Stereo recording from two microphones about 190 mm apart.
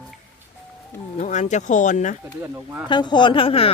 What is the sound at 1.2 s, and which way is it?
Speech, 40° left (ahead or behind).